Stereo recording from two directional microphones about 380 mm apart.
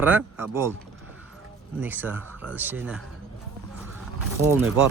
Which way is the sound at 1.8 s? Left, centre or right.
Centre.